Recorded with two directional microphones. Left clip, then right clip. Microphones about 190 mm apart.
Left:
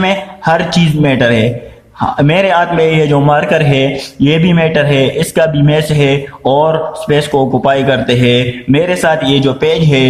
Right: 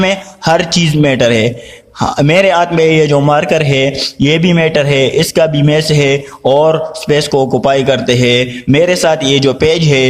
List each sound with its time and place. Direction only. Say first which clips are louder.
0.0 s a man's voice: even; 45° right (ahead or behind)